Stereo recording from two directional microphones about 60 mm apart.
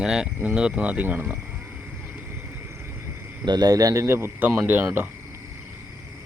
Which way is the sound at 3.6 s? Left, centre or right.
Right.